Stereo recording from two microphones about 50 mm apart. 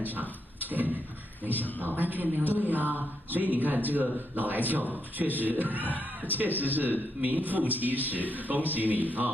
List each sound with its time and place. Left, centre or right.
0.0 s speech: right